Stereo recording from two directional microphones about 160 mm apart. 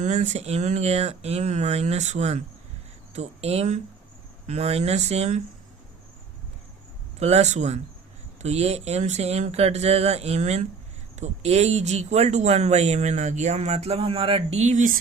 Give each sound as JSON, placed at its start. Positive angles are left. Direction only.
{"t": 0.0, "sound": "speech", "side_deg": -50}
{"t": 7.2, "sound": "speech", "side_deg": -40}